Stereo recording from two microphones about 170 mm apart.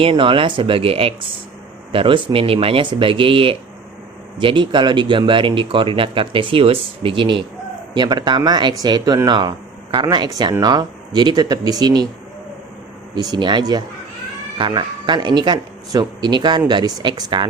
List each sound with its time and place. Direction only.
0.0 s speech: 30° right (ahead or behind)
13.1 s speech: 25° right (ahead or behind)